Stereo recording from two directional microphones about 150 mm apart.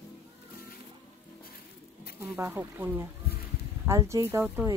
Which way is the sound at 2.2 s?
10° right (ahead or behind).